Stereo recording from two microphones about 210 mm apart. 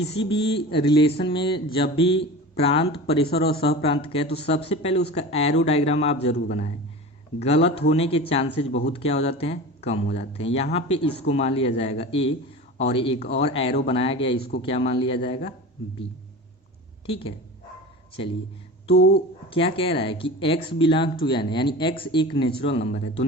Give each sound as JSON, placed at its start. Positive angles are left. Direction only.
{"t": 0.0, "sound": "speech", "side_deg": 25}
{"t": 3.2, "sound": "speech", "side_deg": 50}
{"t": 3.8, "sound": "speech", "side_deg": 25}
{"t": 6.3, "sound": "speech", "side_deg": 50}
{"t": 7.4, "sound": "speech", "side_deg": 30}
{"t": 13.1, "sound": "speech", "side_deg": 50}
{"t": 13.5, "sound": "speech", "side_deg": 25}
{"t": 17.1, "sound": "speech", "side_deg": 25}
{"t": 18.9, "sound": "speech", "side_deg": 50}
{"t": 19.5, "sound": "speech", "side_deg": 25}